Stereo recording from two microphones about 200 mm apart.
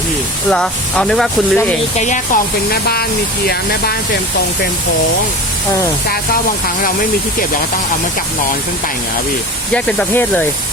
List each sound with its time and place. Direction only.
0.5 s speech: 5° left (ahead or behind)
2.0 s speech: 40° left (ahead or behind)
2.9 s speech: 50° left (ahead or behind)
9.7 s speech: 5° left (ahead or behind)